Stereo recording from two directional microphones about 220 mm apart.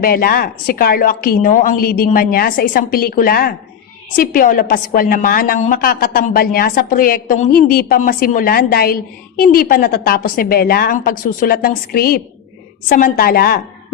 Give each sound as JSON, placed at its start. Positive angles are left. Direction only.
{"t": 0.0, "sound": "a woman's voice", "side_deg": 40}